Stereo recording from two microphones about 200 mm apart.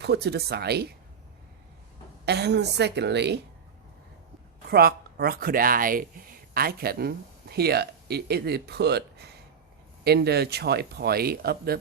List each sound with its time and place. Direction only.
0.0 s a woman's voice: 55° right (ahead or behind)
2.2 s a woman's voice: 55° right (ahead or behind)
4.7 s speech: 50° right (ahead or behind)